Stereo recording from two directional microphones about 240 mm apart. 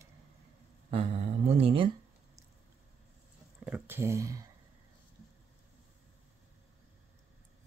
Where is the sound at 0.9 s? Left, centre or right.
Right.